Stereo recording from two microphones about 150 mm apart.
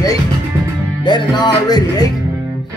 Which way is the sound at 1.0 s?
30° left (ahead or behind).